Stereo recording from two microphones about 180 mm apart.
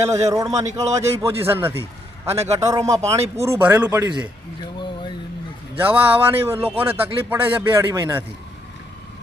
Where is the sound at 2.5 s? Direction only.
15° right (ahead or behind).